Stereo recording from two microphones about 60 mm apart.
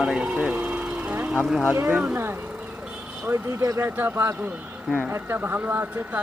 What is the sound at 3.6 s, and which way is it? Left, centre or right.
Speech, right.